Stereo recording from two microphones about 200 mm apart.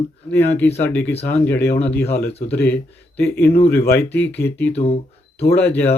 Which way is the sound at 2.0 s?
55° left (ahead or behind).